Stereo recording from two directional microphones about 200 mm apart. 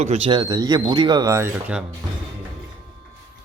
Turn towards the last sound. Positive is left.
turn(degrees=-10)  # may be behind; listen again after turning